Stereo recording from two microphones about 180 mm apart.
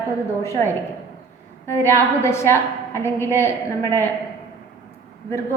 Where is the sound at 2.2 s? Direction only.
15° left (ahead or behind).